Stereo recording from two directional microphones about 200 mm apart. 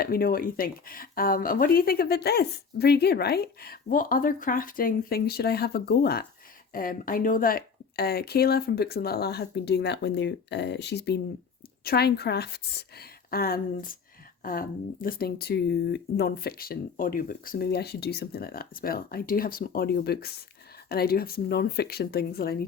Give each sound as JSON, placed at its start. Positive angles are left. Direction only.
{"t": 0.0, "sound": "speech", "side_deg": 50}